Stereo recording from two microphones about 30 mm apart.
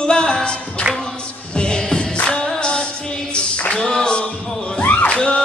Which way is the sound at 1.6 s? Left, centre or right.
Left.